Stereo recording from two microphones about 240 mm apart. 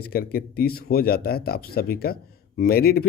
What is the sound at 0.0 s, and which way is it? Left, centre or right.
Speech, left.